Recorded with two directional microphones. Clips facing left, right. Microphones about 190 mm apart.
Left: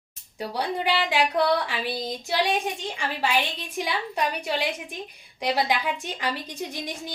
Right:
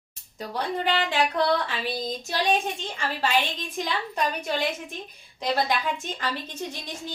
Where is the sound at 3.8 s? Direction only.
10° left (ahead or behind).